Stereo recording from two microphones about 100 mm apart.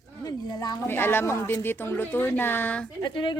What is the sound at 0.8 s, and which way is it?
Speech, 20° left (ahead or behind).